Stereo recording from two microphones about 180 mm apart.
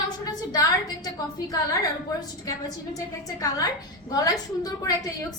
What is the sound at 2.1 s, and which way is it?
A woman's voice, 20° left (ahead or behind).